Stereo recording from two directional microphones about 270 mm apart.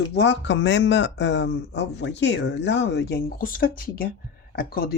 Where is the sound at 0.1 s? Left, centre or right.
Left.